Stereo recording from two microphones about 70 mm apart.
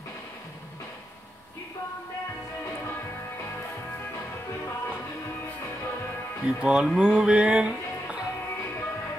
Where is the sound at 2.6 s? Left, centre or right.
Left.